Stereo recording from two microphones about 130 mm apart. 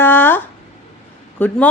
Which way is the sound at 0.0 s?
15° left (ahead or behind).